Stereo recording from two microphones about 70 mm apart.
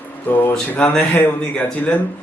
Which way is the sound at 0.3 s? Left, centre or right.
Left.